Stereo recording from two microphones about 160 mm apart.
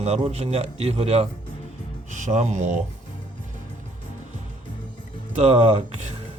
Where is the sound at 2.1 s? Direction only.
50° right (ahead or behind).